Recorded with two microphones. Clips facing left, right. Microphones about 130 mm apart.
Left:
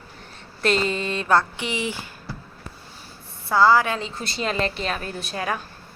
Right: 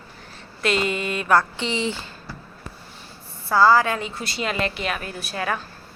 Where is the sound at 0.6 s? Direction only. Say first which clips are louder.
Left 1 dB; 35° left (ahead or behind).